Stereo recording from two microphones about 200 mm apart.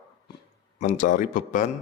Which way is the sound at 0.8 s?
40° left (ahead or behind).